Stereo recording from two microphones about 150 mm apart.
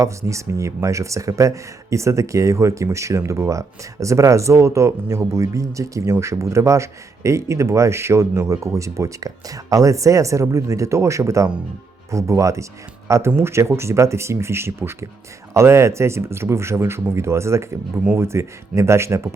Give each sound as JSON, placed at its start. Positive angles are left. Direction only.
{"t": 0.0, "sound": "speech", "side_deg": -20}